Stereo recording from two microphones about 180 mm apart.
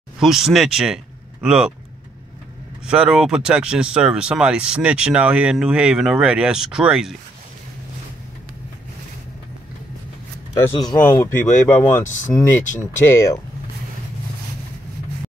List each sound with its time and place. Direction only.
0.2 s speech: centre (ahead or behind)
2.9 s speech: 5° right (ahead or behind)
11.1 s speech: 15° left (ahead or behind)
12.0 s speech: 45° left (ahead or behind)
12.4 s speech: 15° left (ahead or behind)